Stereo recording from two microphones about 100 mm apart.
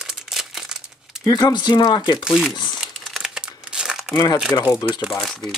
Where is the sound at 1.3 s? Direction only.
40° left (ahead or behind).